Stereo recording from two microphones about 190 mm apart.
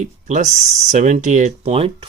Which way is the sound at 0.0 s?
40° right (ahead or behind).